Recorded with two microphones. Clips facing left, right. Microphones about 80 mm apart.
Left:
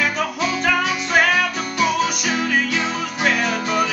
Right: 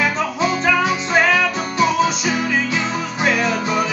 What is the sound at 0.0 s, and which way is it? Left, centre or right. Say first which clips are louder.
Music: right 2 dB; right.